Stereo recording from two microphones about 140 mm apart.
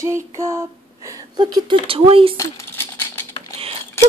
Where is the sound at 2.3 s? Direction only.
20° left (ahead or behind).